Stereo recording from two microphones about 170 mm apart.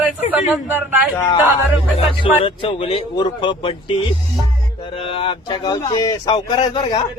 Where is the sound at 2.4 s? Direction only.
35° left (ahead or behind).